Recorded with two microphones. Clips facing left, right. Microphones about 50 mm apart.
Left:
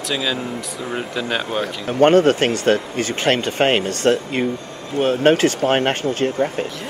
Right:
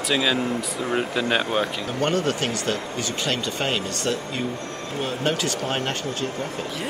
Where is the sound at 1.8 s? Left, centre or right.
Left.